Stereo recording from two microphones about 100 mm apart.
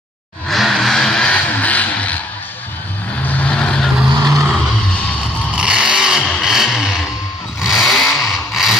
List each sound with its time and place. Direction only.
0.5 s vehicle: centre (ahead or behind)
3.3 s vehicle: 15° left (ahead or behind)
4.1 s vehicle: 40° right (ahead or behind)
5.5 s vehicle: 10° right (ahead or behind)
7.6 s chainsaw: centre (ahead or behind)